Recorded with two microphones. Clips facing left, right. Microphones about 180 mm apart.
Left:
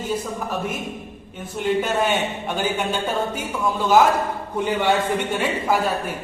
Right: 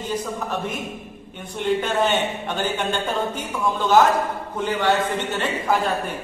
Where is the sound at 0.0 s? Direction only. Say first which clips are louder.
Left 1 dB; 10° left (ahead or behind).